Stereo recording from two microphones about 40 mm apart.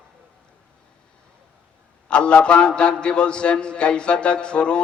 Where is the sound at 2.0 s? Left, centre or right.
Left.